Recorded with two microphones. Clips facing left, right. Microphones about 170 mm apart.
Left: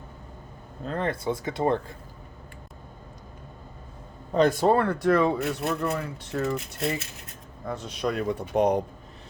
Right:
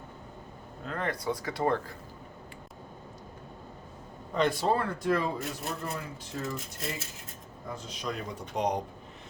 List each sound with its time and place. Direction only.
0.9 s speech: 30° left (ahead or behind)
4.4 s speech: 45° left (ahead or behind)